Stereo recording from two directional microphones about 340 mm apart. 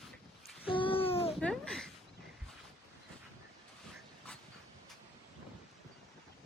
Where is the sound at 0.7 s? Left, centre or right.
Centre.